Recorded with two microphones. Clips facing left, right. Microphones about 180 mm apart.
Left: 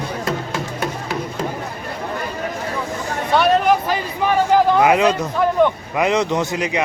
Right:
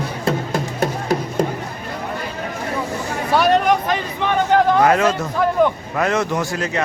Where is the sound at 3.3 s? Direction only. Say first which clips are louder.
Even; centre (ahead or behind).